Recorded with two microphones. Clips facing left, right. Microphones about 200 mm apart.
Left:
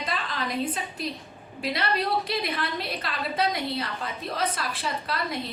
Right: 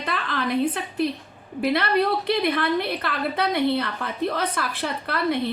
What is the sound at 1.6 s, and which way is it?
A woman's voice, 55° right (ahead or behind).